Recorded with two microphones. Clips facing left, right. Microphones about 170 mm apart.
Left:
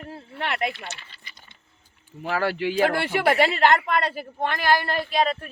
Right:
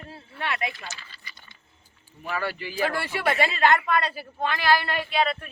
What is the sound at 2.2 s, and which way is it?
Speech, 85° left.